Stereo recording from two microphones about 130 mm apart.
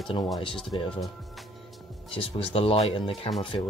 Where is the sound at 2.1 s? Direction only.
45° left (ahead or behind).